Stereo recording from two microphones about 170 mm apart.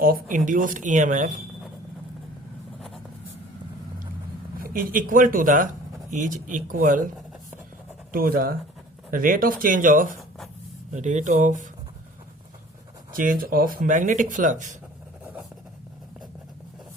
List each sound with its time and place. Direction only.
0.0 s speech: 55° right (ahead or behind)
4.6 s speech: 55° right (ahead or behind)
8.1 s speech: 60° right (ahead or behind)
10.2 s writing: centre (ahead or behind)
10.9 s speech: 45° right (ahead or behind)
13.1 s speech: 55° right (ahead or behind)